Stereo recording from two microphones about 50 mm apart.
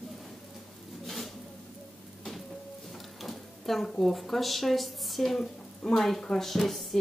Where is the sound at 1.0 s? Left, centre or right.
Centre.